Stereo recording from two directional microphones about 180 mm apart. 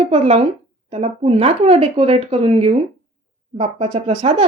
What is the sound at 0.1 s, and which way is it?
A woman's voice, 30° right (ahead or behind).